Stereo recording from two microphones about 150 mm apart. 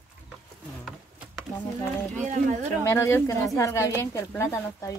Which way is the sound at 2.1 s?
55° right (ahead or behind).